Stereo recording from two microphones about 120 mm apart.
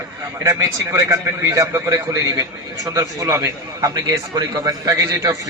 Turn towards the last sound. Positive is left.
turn(degrees=-30)  # may be behind; listen again after turning